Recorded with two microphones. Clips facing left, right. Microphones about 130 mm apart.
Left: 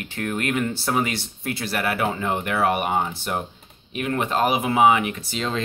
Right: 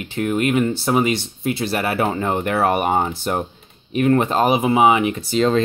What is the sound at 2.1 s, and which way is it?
Speech, 40° right (ahead or behind).